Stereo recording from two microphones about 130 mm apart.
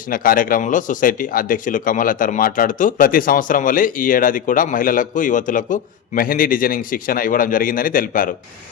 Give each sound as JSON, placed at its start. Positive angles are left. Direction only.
{"t": 0.1, "sound": "speech", "side_deg": 90}